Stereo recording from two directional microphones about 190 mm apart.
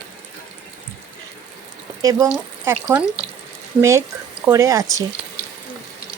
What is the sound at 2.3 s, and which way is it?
Speech, 5° right (ahead or behind).